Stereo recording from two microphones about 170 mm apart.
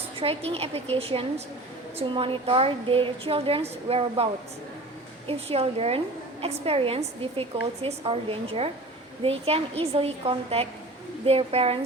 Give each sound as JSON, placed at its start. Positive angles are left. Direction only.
{"t": 0.2, "sound": "a woman's voice", "side_deg": -35}
{"t": 5.5, "sound": "a woman's voice", "side_deg": -35}